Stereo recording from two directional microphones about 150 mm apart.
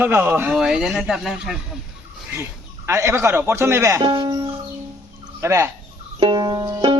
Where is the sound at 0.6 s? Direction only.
Centre (ahead or behind).